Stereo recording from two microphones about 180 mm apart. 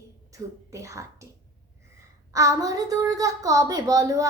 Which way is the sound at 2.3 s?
20° right (ahead or behind).